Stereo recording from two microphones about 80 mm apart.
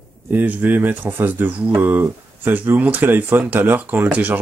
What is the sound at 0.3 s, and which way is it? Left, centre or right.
Speech, right.